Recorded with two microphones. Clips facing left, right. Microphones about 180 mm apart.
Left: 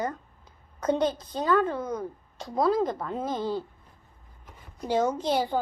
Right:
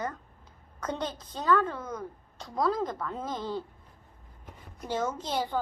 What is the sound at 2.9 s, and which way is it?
Speech, 25° left (ahead or behind).